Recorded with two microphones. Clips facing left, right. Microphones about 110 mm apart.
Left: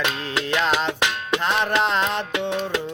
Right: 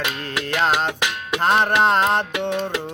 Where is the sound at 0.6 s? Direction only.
45° right (ahead or behind).